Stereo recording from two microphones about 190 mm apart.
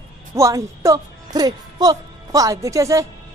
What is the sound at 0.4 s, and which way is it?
A man's voice, 15° right (ahead or behind).